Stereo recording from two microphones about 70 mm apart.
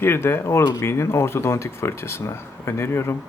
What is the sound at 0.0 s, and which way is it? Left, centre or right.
Speech, left.